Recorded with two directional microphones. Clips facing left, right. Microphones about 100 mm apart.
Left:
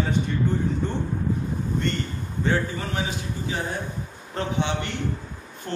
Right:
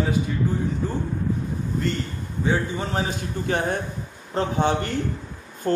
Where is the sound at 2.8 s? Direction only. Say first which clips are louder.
Right 3 dB; 40° right (ahead or behind).